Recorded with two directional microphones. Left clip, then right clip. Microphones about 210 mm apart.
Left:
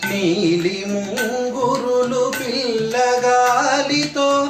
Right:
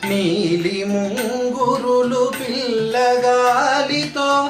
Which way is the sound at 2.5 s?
15° right (ahead or behind).